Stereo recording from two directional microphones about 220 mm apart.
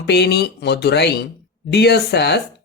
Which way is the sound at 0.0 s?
50° left (ahead or behind).